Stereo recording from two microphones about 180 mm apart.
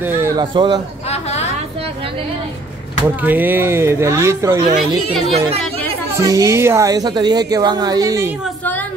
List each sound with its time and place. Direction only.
0.4 s a woman's voice: 25° right (ahead or behind)
3.3 s speech: 10° right (ahead or behind)
6.1 s a woman's voice: 20° right (ahead or behind)